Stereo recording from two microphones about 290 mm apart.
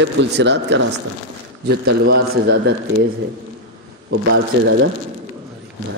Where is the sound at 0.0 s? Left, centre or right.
Right.